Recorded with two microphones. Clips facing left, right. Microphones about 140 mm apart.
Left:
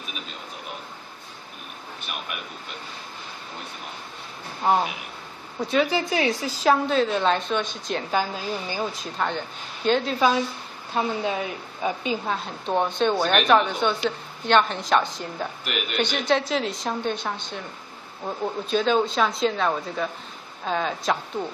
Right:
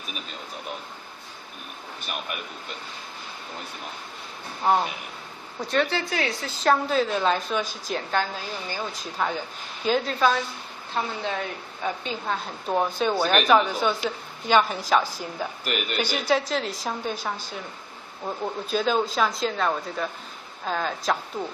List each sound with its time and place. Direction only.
4.6 s speech: centre (ahead or behind)
5.9 s a woman's voice: 15° left (ahead or behind)
6.6 s speech: centre (ahead or behind)
8.1 s a woman's voice: 10° left (ahead or behind)
8.9 s a woman's voice: centre (ahead or behind)
12.4 s speech: centre (ahead or behind)